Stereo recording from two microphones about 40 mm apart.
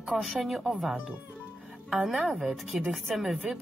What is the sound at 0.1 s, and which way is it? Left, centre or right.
Music, centre.